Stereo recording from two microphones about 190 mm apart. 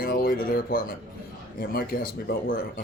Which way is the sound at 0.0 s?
50° left (ahead or behind).